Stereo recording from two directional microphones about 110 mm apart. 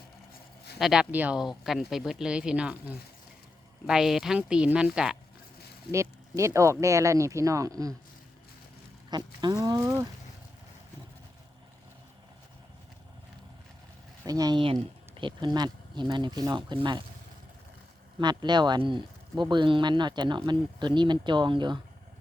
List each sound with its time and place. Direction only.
0.8 s speech: 5° right (ahead or behind)
5.9 s speech: 25° right (ahead or behind)
9.0 s speech: 40° right (ahead or behind)
9.6 s speech: 25° right (ahead or behind)
14.3 s speech: 35° right (ahead or behind)
14.6 s speech: 55° right (ahead or behind)
18.2 s speech: 40° right (ahead or behind)